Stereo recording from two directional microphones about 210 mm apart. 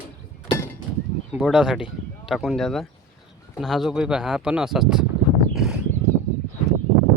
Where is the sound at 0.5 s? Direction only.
10° left (ahead or behind).